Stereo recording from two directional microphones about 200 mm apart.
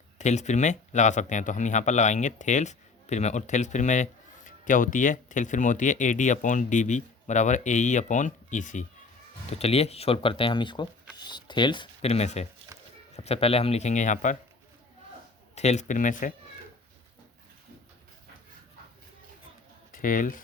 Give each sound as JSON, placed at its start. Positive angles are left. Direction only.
{"t": 0.2, "sound": "a man's voice", "side_deg": 35}
{"t": 12.7, "sound": "a sound", "side_deg": -15}
{"t": 13.1, "sound": "a man's voice", "side_deg": 30}
{"t": 15.5, "sound": "a man's voice", "side_deg": 35}
{"t": 19.9, "sound": "speech", "side_deg": 40}